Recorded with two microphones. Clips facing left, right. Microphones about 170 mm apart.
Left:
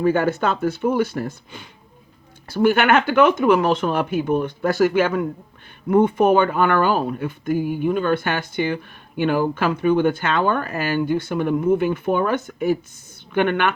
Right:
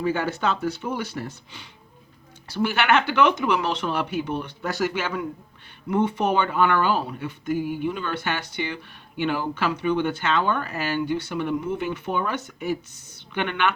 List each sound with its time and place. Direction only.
0.0 s speech: 55° left (ahead or behind)